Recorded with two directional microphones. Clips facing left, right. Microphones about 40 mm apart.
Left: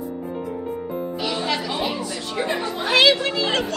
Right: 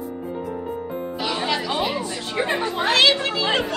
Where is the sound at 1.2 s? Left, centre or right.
Centre.